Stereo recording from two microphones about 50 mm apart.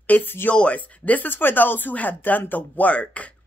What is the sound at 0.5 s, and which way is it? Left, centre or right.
Speech, left.